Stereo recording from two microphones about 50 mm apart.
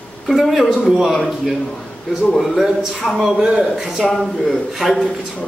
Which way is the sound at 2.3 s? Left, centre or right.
Centre.